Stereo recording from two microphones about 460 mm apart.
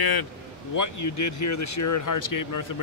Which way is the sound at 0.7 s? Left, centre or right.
Left.